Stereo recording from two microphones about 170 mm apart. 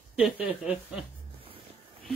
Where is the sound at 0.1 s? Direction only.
5° right (ahead or behind).